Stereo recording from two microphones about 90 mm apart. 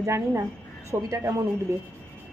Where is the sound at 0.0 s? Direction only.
30° right (ahead or behind).